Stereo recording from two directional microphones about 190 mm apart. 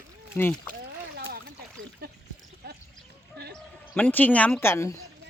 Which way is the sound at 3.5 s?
10° left (ahead or behind).